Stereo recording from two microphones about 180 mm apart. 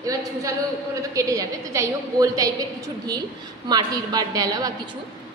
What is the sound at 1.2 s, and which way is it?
A woman's voice, 20° right (ahead or behind).